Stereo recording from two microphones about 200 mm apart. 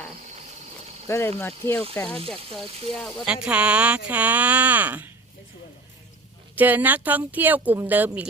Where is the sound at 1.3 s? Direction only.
15° left (ahead or behind); by 5.1 s 10° right (ahead or behind).